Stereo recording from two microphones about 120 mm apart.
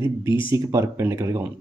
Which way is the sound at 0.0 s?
20° right (ahead or behind).